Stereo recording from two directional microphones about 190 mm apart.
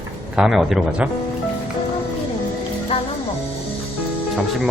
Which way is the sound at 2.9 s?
30° left (ahead or behind).